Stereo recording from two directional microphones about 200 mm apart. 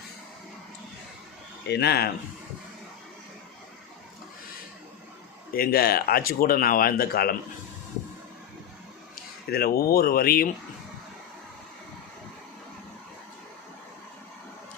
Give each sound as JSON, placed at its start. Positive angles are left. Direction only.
{"t": 1.7, "sound": "speech", "side_deg": 55}
{"t": 5.5, "sound": "speech", "side_deg": 50}
{"t": 9.5, "sound": "speech", "side_deg": 50}